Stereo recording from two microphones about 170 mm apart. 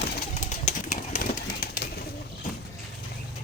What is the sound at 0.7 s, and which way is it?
Pigeon, 40° left (ahead or behind).